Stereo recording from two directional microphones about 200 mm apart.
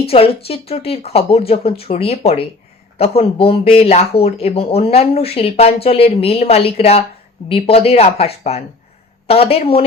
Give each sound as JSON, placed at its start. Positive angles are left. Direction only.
{"t": 0.0, "sound": "speech", "side_deg": 30}